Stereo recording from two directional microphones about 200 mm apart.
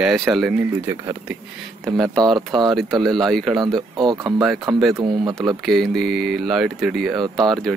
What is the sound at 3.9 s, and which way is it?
Speech, 20° right (ahead or behind).